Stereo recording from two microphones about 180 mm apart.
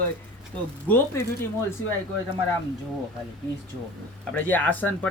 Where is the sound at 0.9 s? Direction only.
15° left (ahead or behind).